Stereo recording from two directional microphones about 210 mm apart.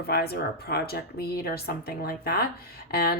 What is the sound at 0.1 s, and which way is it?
Speech, 50° left (ahead or behind).